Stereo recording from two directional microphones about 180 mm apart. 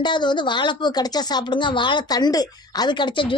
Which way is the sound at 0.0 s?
25° left (ahead or behind).